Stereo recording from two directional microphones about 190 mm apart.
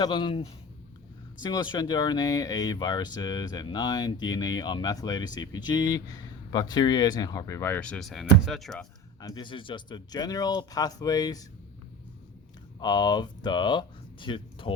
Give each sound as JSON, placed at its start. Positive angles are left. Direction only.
{"t": 0.0, "sound": "speech", "side_deg": 25}
{"t": 9.2, "sound": "speech", "side_deg": 25}
{"t": 12.8, "sound": "speech", "side_deg": 20}